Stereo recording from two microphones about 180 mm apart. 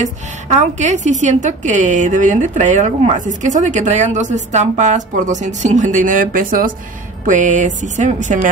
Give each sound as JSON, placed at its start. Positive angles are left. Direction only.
{"t": 0.0, "sound": "a woman's voice", "side_deg": -40}